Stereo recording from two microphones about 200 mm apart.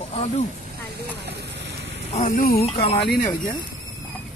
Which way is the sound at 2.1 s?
35° left (ahead or behind).